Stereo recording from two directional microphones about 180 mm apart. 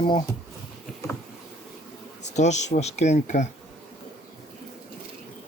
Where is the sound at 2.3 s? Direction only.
40° left (ahead or behind).